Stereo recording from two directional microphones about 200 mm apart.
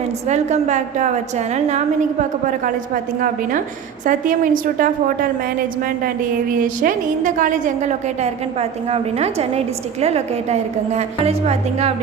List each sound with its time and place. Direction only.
0.3 s a woman's voice: 35° right (ahead or behind)
6.5 s a woman's voice: 45° right (ahead or behind)